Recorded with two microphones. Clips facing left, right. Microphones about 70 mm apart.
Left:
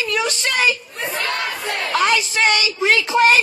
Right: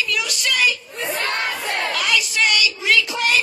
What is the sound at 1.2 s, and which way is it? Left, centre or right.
Battle cry, right.